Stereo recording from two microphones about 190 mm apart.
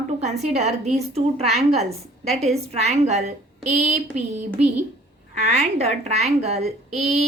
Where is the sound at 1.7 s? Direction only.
35° right (ahead or behind).